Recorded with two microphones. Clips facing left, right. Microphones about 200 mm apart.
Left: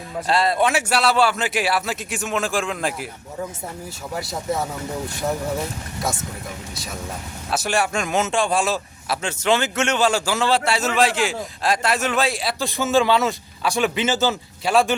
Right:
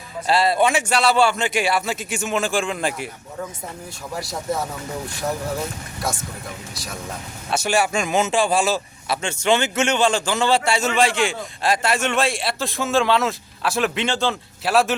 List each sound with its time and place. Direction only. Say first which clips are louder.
0.3 s a man's voice: right 1 dB; centre (ahead or behind)
4.1 s a man's voice: even; centre (ahead or behind)
7.5 s a man's voice: right 2 dB; centre (ahead or behind)